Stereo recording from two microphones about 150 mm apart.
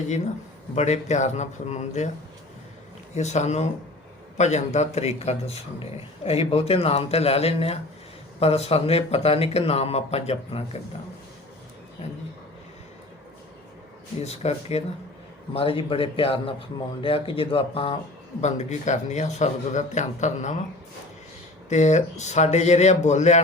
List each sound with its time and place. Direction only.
0.8 s a man's voice: 50° left (ahead or behind)
3.2 s a man's voice: 50° left (ahead or behind)
14.3 s a man's voice: 45° left (ahead or behind)
18.3 s a man's voice: 50° left (ahead or behind)
21.7 s a man's voice: 50° left (ahead or behind)